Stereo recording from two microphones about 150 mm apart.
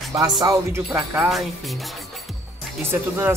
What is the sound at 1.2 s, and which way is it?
Speech, centre (ahead or behind).